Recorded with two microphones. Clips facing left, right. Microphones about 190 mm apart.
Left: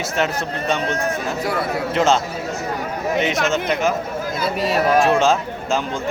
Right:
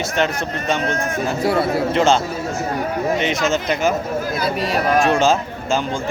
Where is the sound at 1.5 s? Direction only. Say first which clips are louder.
Right 6 dB; 25° right (ahead or behind).